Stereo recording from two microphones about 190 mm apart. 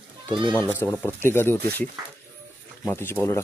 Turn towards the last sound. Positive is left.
turn(degrees=10)  # may be behind; listen again after turning